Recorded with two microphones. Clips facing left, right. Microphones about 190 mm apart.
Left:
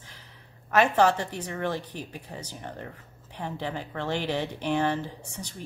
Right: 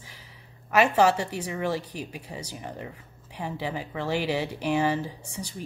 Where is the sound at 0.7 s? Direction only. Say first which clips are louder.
Right 1 dB; 10° right (ahead or behind).